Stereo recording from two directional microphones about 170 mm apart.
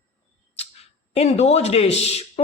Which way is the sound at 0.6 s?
35° left (ahead or behind).